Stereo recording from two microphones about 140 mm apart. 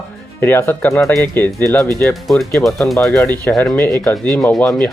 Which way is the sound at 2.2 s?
Centre (ahead or behind).